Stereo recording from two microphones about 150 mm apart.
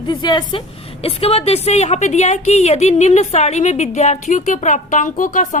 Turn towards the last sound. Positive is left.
turn(degrees=60)  # may be behind; listen again after turning